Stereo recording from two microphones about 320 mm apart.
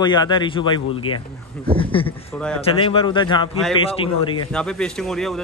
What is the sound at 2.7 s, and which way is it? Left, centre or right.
Speech, centre.